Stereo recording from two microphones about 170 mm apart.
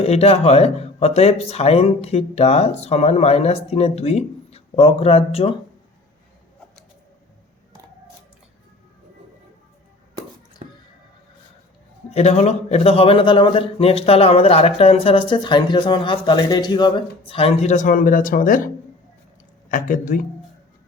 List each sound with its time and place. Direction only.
0.0 s a man's voice: 35° left (ahead or behind)
10.6 s a sound: 40° right (ahead or behind)
12.1 s a man's voice: 40° left (ahead or behind)